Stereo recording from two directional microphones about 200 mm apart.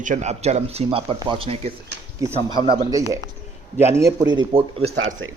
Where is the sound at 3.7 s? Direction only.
10° right (ahead or behind); by 4.9 s 30° right (ahead or behind).